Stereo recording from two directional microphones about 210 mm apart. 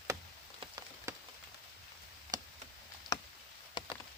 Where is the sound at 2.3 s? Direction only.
20° right (ahead or behind).